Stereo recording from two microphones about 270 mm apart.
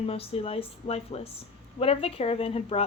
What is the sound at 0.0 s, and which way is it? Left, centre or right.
Speech, left.